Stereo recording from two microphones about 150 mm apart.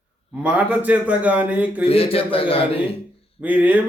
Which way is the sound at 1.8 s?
40° left (ahead or behind).